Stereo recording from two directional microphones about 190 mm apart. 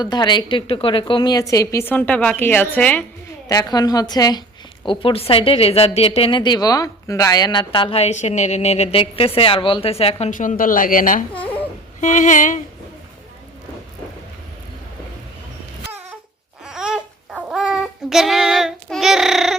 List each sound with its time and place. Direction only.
0.0 s a woman's voice: 20° left (ahead or behind)
3.5 s a woman's voice: 20° left (ahead or behind); by 12.5 s 40° left (ahead or behind)
16.6 s child singing: 5° right (ahead or behind)